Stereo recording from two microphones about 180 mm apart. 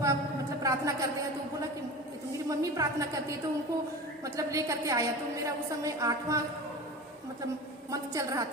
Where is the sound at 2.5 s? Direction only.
20° right (ahead or behind).